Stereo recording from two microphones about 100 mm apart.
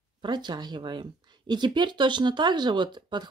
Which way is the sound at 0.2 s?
45° right (ahead or behind).